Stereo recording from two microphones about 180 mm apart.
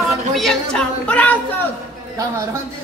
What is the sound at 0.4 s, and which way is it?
Speech, 5° left (ahead or behind).